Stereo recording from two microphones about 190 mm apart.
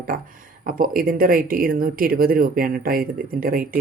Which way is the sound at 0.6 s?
50° right (ahead or behind).